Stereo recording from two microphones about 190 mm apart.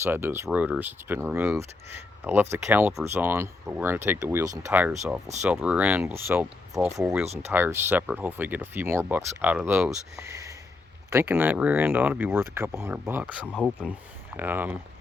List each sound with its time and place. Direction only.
0.0 s speech: 10° right (ahead or behind)